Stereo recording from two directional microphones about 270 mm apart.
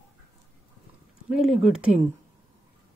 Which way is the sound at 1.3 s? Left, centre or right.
Centre.